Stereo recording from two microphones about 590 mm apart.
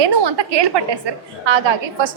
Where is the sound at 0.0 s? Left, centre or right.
Right.